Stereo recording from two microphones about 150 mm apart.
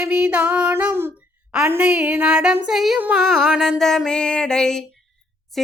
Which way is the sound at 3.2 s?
Centre (ahead or behind).